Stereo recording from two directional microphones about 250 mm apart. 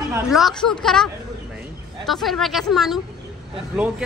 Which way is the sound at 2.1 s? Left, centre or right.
Centre.